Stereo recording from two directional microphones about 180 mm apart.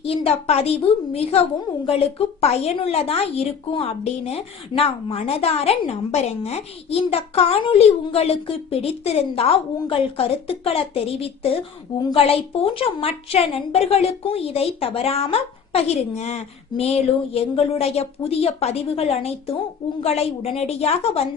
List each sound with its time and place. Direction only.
0.0 s a woman's voice: 35° left (ahead or behind)